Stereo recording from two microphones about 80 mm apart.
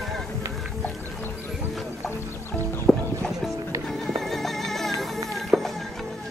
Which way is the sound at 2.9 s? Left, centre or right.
Left.